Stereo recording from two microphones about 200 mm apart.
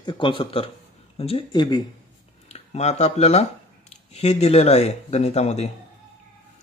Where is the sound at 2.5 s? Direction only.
35° left (ahead or behind).